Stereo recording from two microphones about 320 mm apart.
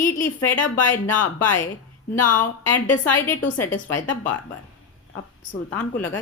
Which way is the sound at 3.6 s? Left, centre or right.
Centre.